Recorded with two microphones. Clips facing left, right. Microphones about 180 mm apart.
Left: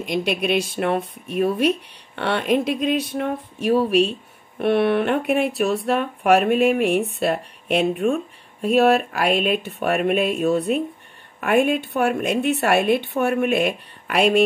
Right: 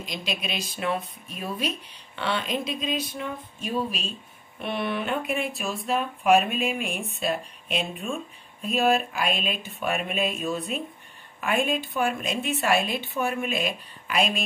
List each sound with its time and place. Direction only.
0.0 s a woman's voice: 65° left (ahead or behind)